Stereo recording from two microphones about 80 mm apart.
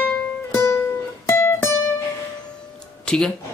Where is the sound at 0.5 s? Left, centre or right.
Left.